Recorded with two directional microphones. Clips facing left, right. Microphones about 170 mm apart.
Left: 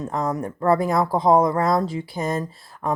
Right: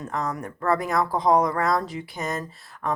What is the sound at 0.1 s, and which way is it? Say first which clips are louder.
Speech: left 3 dB; 30° left (ahead or behind).